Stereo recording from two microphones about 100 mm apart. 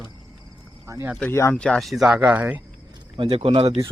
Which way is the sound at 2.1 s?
15° right (ahead or behind).